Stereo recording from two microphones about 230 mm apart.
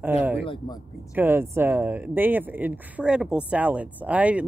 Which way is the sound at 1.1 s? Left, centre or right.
Centre.